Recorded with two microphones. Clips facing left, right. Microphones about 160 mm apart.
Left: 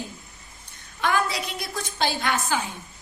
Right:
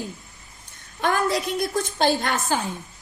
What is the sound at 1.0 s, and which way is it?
A woman's voice, 45° right (ahead or behind).